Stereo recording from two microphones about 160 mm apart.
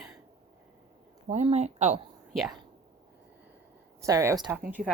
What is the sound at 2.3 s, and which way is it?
Speech, centre (ahead or behind).